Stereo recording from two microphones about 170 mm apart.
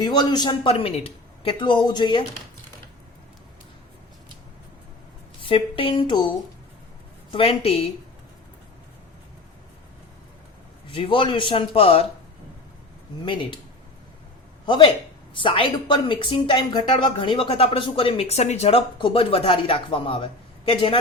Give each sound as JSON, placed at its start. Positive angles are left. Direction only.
{"t": 0.0, "sound": "a woman's voice", "side_deg": 25}
{"t": 5.4, "sound": "speech", "side_deg": 30}
{"t": 7.3, "sound": "speech", "side_deg": 35}
{"t": 10.9, "sound": "speech", "side_deg": 30}
{"t": 14.7, "sound": "a woman's voice", "side_deg": 25}